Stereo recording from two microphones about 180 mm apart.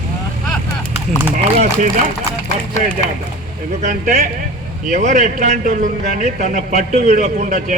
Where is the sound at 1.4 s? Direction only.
40° right (ahead or behind).